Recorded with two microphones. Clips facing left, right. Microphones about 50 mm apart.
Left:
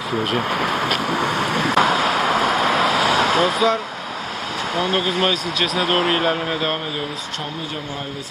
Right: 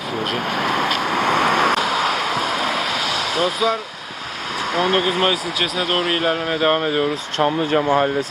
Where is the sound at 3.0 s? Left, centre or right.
Left.